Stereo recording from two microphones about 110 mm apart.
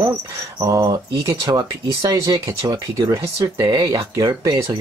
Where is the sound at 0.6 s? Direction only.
30° right (ahead or behind).